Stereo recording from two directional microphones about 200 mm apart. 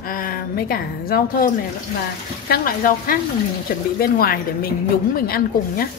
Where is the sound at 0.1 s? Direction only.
45° left (ahead or behind).